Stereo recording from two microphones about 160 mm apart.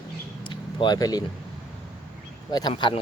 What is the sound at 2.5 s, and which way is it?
Speech, 25° left (ahead or behind).